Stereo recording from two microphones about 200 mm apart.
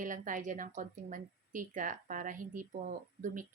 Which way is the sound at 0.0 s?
40° right (ahead or behind).